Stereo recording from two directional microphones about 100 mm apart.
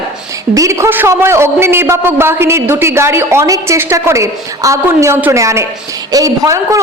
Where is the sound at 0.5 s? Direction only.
30° right (ahead or behind).